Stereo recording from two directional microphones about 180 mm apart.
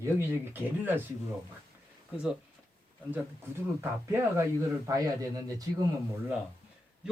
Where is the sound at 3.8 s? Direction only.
15° right (ahead or behind).